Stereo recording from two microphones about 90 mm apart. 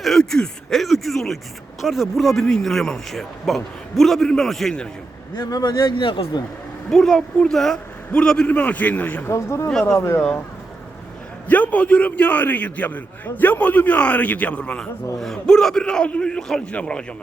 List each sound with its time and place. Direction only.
0.0 s speech: 5° left (ahead or behind)
5.4 s speech: 45° left (ahead or behind)
6.0 s speech: 70° left (ahead or behind)
6.9 s a man's voice: 5° left (ahead or behind)
9.3 s speech: 30° left (ahead or behind)
11.4 s a man's voice: 20° left (ahead or behind)